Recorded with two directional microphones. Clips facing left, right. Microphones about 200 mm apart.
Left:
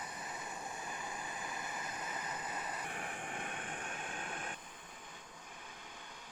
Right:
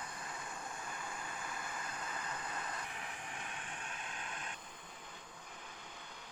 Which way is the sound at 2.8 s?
50° left (ahead or behind).